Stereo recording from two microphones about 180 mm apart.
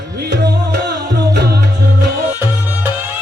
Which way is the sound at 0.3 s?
65° right (ahead or behind).